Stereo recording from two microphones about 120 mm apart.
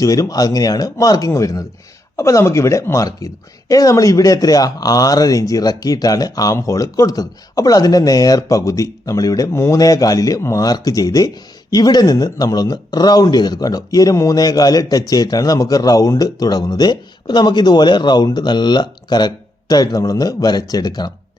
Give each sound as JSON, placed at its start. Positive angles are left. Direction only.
{"t": 0.0, "sound": "a woman's voice", "side_deg": 30}